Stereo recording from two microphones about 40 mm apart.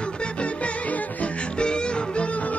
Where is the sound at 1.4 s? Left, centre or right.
Left.